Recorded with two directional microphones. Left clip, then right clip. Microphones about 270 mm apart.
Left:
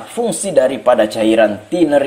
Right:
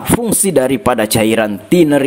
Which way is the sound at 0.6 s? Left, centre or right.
Right.